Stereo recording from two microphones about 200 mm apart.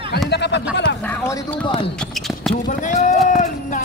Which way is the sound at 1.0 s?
10° left (ahead or behind).